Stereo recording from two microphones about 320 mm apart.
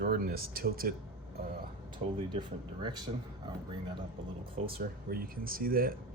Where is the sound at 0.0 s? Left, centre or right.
Right.